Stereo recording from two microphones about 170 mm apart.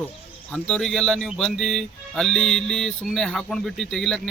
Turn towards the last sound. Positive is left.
turn(degrees=5)  # may be behind; listen again after turning